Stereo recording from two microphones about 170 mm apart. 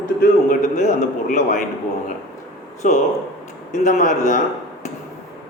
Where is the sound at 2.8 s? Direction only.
50° left (ahead or behind).